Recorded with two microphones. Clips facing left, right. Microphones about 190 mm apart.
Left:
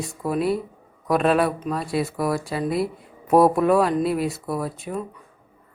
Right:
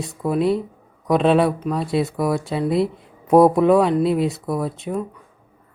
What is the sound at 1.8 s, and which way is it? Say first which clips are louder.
Speech: right 3 dB; 25° right (ahead or behind).